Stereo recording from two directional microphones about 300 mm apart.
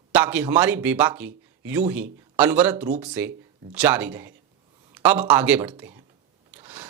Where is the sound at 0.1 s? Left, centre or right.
Centre.